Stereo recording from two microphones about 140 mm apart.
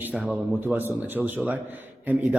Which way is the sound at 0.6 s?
15° right (ahead or behind).